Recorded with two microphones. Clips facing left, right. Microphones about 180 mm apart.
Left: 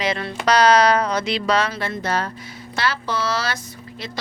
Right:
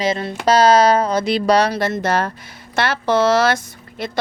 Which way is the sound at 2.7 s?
55° right (ahead or behind).